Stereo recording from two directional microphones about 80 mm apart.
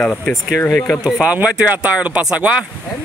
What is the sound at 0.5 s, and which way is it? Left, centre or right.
Speech, left.